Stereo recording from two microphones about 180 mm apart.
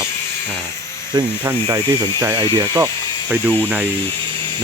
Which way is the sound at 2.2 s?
20° right (ahead or behind).